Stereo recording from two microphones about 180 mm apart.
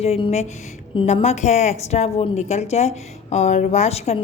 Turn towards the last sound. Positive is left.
turn(degrees=35)  # may be behind; listen again after turning